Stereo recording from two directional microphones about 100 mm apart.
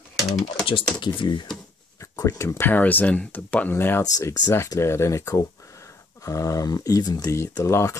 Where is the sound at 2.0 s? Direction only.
30° left (ahead or behind).